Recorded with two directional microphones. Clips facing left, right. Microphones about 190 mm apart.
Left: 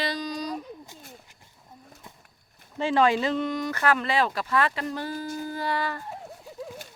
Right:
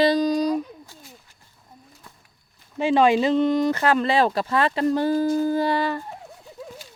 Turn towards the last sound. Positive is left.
turn(degrees=-25)  # may be behind; listen again after turning